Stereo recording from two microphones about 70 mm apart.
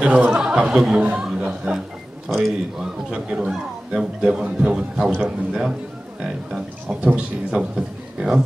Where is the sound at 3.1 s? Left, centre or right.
Centre.